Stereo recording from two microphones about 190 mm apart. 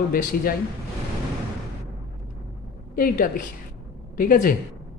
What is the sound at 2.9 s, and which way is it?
Speech, 45° left (ahead or behind).